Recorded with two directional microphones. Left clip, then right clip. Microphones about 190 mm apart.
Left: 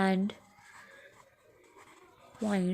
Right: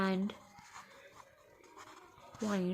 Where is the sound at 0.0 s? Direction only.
30° left (ahead or behind).